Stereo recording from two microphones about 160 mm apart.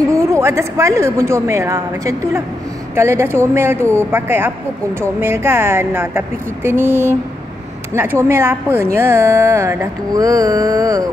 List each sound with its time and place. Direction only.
0.3 s speech: 15° right (ahead or behind)